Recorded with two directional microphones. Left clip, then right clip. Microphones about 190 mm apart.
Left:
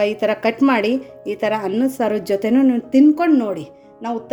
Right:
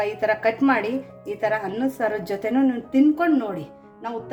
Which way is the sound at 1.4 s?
40° left (ahead or behind).